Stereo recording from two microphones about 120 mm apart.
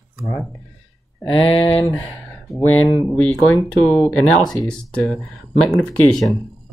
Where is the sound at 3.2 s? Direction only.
10° left (ahead or behind).